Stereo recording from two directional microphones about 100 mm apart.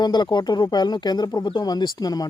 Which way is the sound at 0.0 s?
45° left (ahead or behind).